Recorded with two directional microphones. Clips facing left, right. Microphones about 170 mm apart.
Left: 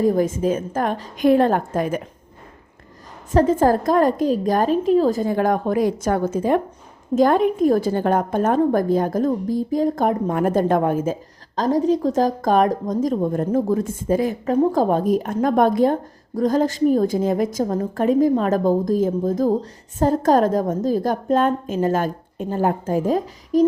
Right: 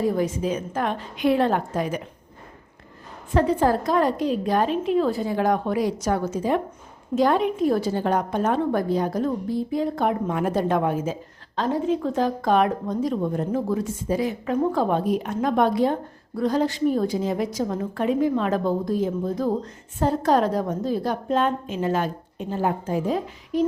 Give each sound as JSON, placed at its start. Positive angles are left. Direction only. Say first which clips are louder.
{"t": 0.0, "sound": "a woman's voice", "louder": "left 5 dB", "side_deg": 45}
{"t": 3.3, "sound": "a woman's voice", "louder": "left 4 dB", "side_deg": 45}